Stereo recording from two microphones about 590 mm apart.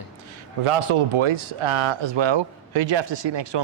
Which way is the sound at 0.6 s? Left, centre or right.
Right.